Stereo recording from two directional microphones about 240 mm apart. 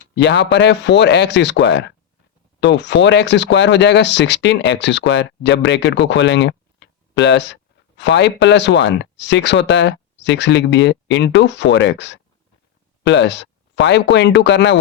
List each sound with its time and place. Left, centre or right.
0.2 s speech: left